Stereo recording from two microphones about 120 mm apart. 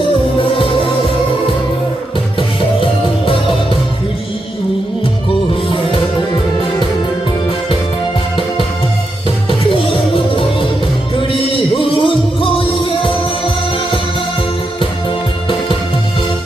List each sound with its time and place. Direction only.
12.0 s music: 45° left (ahead or behind)